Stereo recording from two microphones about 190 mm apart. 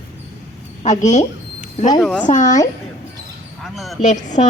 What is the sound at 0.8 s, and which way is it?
A woman's voice, 40° left (ahead or behind).